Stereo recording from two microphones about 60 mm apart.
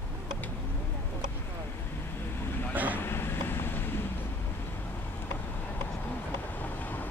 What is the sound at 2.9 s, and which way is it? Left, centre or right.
Vehicle, left.